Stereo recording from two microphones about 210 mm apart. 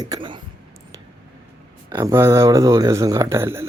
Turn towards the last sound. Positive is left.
turn(degrees=-10)  # may be behind; listen again after turning